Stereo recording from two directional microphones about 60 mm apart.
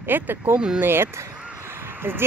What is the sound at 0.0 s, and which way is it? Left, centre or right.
Speech, right.